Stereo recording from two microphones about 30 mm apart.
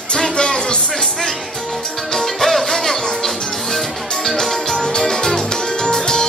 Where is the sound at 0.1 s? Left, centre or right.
Left.